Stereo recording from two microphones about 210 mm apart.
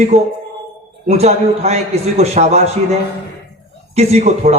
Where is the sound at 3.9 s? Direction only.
30° right (ahead or behind).